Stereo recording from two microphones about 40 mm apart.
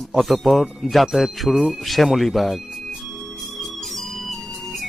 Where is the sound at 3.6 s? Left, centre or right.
Centre.